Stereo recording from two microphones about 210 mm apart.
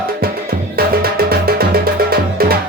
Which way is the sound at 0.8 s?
45° right (ahead or behind).